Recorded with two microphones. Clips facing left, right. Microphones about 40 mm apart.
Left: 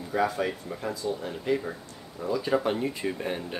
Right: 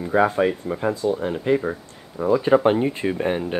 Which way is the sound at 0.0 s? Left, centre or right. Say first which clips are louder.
Right 8 dB; right.